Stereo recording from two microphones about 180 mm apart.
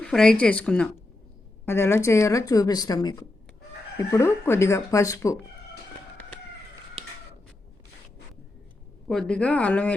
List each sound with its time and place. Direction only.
0.0 s speech: 5° left (ahead or behind)
9.0 s speech: 5° left (ahead or behind)